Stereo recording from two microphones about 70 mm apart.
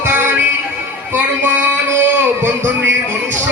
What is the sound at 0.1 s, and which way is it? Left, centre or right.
Music, right.